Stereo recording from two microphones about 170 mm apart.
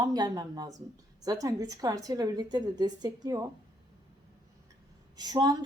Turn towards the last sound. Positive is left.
turn(degrees=-25)  # may be behind; listen again after turning